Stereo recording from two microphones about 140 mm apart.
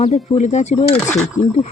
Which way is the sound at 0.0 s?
50° left (ahead or behind).